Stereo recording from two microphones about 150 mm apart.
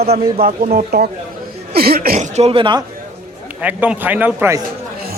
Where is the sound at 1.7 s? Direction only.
90° right.